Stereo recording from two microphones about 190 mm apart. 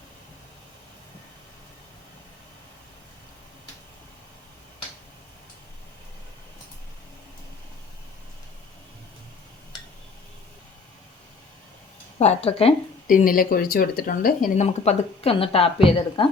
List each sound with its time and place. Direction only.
12.2 s speech: 35° left (ahead or behind)
13.1 s speech: 45° left (ahead or behind); by 16.3 s 25° left (ahead or behind)